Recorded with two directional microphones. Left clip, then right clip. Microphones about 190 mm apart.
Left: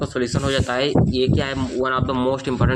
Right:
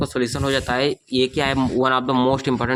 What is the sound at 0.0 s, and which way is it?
Speech, 15° right (ahead or behind).